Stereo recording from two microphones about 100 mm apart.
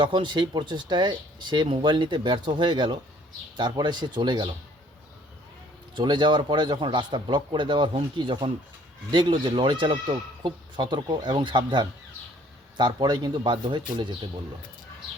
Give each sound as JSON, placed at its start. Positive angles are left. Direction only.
{"t": 0.0, "sound": "speech", "side_deg": -55}
{"t": 6.0, "sound": "speech", "side_deg": -50}